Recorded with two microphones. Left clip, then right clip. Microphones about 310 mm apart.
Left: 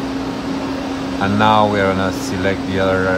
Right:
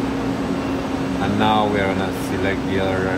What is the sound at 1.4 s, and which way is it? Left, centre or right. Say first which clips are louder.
Speech: left 5 dB; left.